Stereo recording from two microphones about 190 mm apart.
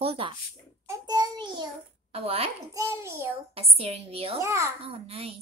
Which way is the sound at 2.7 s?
15° right (ahead or behind).